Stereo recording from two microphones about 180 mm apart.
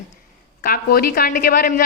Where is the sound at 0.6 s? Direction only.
55° left (ahead or behind).